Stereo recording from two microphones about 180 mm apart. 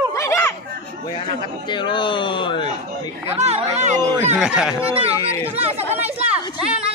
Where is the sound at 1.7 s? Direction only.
25° left (ahead or behind).